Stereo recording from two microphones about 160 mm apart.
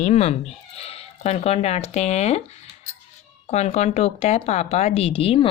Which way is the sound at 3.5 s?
45° left (ahead or behind).